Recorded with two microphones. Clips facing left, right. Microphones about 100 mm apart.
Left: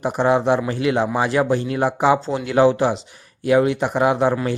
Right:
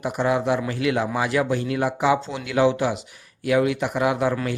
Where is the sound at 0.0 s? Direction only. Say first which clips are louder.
Left 4 dB; 30° left (ahead or behind).